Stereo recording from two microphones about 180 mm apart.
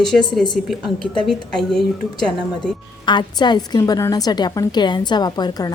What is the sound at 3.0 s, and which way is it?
A woman's voice, 25° left (ahead or behind).